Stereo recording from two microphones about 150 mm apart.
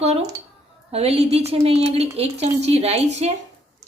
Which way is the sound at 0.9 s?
40° right (ahead or behind).